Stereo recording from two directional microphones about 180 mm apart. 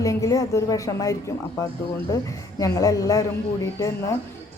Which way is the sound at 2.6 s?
20° left (ahead or behind).